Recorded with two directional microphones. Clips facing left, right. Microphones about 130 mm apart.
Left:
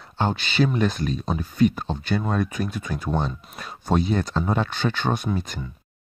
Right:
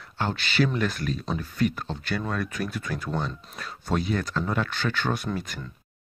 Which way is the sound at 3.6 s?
20° left (ahead or behind).